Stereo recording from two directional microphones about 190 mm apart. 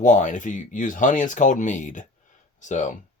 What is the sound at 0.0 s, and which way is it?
Speech, 40° left (ahead or behind).